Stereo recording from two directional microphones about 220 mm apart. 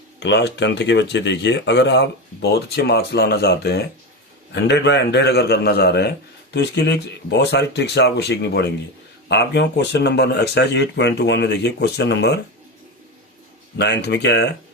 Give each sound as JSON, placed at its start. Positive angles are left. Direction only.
{"t": 0.2, "sound": "speech", "side_deg": 50}
{"t": 13.7, "sound": "speech", "side_deg": 50}